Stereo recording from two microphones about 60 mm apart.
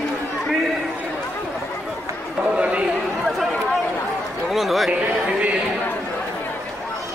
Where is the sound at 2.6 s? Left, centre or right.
Right.